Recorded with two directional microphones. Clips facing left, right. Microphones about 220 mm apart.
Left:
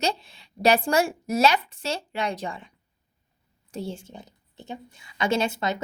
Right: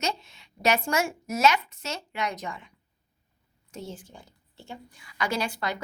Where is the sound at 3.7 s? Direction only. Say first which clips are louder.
Left 6 dB; 30° left (ahead or behind).